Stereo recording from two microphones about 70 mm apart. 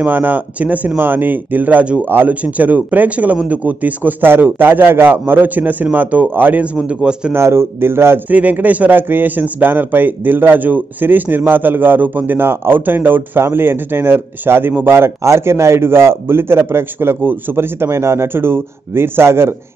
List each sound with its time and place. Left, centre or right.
0.0 s a man's voice: right
7.3 s speech: right
8.3 s speech: right